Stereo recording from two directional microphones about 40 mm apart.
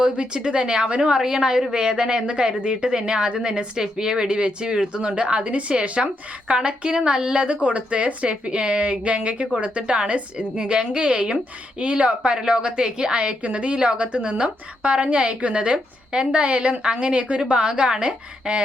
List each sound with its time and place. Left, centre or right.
0.0 s a woman's voice: right